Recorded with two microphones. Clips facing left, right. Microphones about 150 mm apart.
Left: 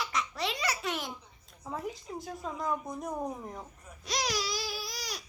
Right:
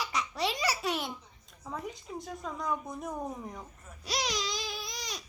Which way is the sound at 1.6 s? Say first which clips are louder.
Left 2 dB; centre (ahead or behind).